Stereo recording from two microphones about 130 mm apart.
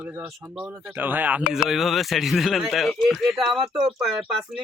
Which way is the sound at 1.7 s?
Centre (ahead or behind).